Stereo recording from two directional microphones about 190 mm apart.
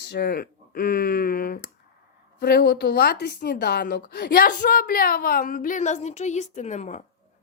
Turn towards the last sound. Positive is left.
turn(degrees=40)  # may be behind; listen again after turning